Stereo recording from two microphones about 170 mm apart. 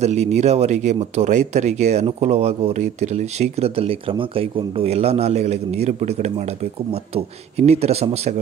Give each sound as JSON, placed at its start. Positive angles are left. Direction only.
{"t": 0.0, "sound": "speech", "side_deg": -40}